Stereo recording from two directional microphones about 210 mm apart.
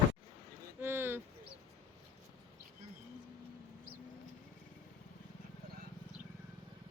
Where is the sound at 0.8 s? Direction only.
10° right (ahead or behind).